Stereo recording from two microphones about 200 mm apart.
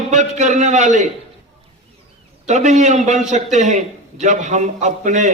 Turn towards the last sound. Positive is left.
turn(degrees=-35)  # may be behind; listen again after turning